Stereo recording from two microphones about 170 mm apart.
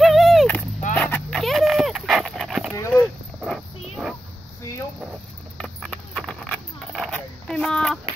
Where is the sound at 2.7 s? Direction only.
20° left (ahead or behind).